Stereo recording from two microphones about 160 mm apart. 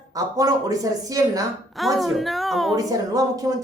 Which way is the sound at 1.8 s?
Centre (ahead or behind).